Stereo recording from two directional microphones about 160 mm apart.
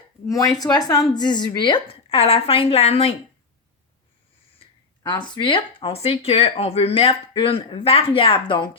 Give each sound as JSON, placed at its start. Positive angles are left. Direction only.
{"t": 0.3, "sound": "speech", "side_deg": 20}
{"t": 5.0, "sound": "speech", "side_deg": 30}